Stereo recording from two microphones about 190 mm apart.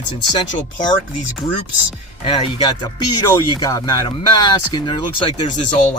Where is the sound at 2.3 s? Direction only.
25° left (ahead or behind).